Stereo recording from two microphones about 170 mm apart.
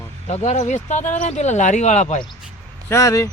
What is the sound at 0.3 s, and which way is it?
Speech, 40° left (ahead or behind).